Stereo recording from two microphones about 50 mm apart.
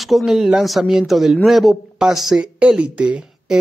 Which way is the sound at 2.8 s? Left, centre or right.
Right.